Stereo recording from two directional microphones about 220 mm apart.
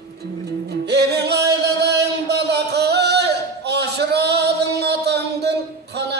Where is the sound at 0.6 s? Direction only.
50° right (ahead or behind).